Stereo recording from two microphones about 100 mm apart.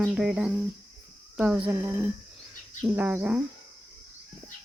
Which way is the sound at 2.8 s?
15° right (ahead or behind).